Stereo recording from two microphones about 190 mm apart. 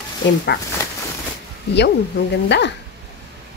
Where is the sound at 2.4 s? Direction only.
65° left (ahead or behind).